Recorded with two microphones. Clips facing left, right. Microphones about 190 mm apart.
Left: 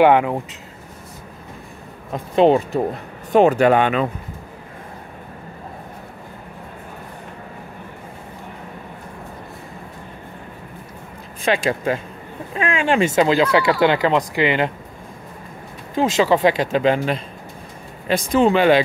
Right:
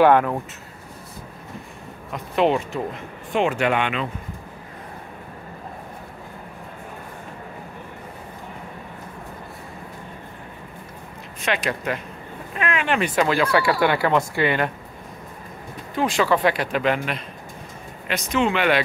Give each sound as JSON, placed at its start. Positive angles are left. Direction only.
{"t": 0.0, "sound": "speech", "side_deg": 15}
{"t": 2.1, "sound": "speech", "side_deg": 35}
{"t": 11.4, "sound": "speech", "side_deg": 30}
{"t": 16.0, "sound": "speech", "side_deg": 25}